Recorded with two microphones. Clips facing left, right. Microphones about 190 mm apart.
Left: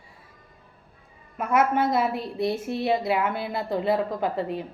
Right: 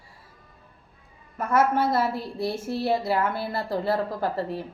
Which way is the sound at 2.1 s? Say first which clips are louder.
Left 2 dB; 20° left (ahead or behind).